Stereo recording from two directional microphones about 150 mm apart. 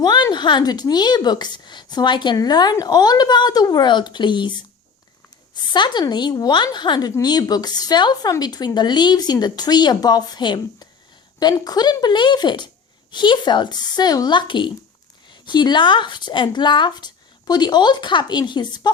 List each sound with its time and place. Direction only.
0.0 s a woman's voice: 30° left (ahead or behind)
5.7 s a woman's voice: 30° left (ahead or behind)